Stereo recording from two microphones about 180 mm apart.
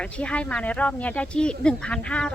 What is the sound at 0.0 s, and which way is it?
Speech, 5° left (ahead or behind).